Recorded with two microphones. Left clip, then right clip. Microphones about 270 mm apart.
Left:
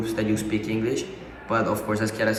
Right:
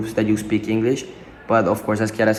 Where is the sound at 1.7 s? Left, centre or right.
Centre.